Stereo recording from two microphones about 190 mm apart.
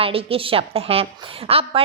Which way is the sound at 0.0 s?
30° right (ahead or behind).